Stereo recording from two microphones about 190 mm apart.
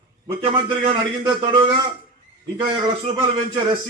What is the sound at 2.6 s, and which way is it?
A man's voice, 20° right (ahead or behind).